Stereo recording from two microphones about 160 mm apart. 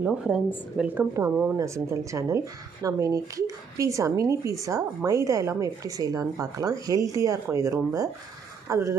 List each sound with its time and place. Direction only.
0.0 s speech: 5° right (ahead or behind)